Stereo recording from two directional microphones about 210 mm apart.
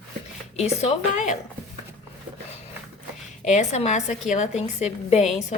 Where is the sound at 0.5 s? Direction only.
30° left (ahead or behind).